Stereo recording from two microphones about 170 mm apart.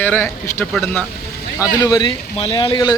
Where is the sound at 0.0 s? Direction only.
10° left (ahead or behind).